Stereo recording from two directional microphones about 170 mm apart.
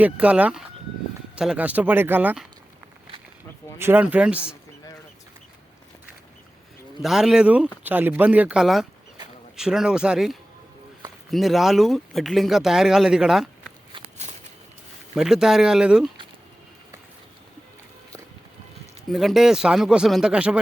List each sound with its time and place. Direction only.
0.0 s speech: 10° right (ahead or behind)
3.8 s speech: 10° right (ahead or behind)
7.0 s speech: centre (ahead or behind)
13.9 s walk: 30° right (ahead or behind)
15.1 s speech: 5° right (ahead or behind)
19.1 s speech: centre (ahead or behind)